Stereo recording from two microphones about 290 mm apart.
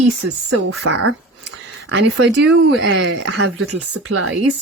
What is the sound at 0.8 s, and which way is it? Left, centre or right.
A woman's voice, right.